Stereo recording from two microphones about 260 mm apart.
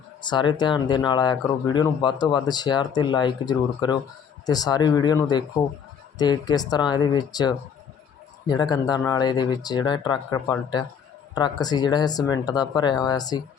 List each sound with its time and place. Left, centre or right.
0.2 s speech: centre